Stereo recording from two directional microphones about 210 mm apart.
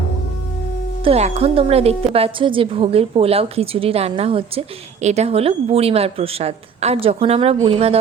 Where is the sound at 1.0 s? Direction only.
30° right (ahead or behind).